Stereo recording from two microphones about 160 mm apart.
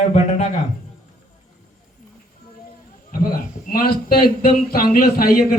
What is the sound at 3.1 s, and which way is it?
A man's voice, 65° left (ahead or behind).